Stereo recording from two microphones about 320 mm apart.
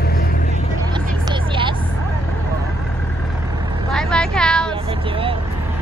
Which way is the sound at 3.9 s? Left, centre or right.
Centre.